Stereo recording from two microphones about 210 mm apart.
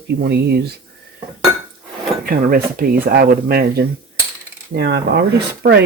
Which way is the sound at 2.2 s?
45° right (ahead or behind).